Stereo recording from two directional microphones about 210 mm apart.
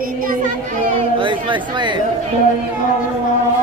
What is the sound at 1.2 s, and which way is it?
Chatter, 25° right (ahead or behind).